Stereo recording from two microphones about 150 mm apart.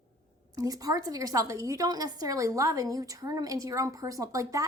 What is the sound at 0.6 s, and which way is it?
A woman's voice, 25° right (ahead or behind).